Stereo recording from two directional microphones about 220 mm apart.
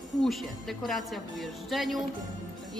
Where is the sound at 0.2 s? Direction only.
Centre (ahead or behind).